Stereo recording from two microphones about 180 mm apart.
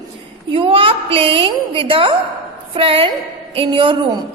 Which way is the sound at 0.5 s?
30° right (ahead or behind).